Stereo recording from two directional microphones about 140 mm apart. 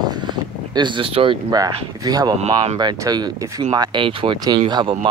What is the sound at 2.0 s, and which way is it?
Speech, 25° right (ahead or behind).